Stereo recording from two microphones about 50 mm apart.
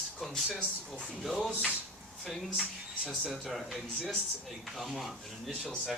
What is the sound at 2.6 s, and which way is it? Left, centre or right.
Speech, centre.